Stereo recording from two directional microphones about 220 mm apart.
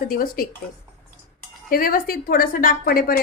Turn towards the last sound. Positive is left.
turn(degrees=40)  # may be behind; listen again after turning